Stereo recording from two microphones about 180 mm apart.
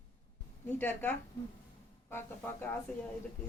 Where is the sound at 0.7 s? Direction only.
10° left (ahead or behind).